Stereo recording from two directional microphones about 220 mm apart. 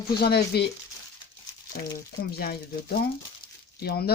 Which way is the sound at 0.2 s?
45° left (ahead or behind).